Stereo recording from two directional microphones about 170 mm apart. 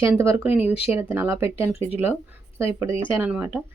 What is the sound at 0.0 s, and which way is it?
Speech, 15° right (ahead or behind).